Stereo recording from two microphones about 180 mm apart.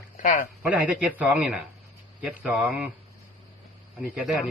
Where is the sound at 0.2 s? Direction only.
45° left (ahead or behind).